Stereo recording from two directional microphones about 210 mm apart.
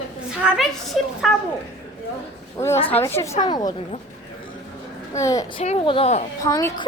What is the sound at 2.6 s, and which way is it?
Speech, 30° left (ahead or behind).